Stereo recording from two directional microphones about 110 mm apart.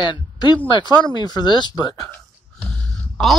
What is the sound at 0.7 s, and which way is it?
Speech, 45° left (ahead or behind).